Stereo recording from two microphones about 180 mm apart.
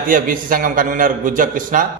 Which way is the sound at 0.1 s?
50° right (ahead or behind).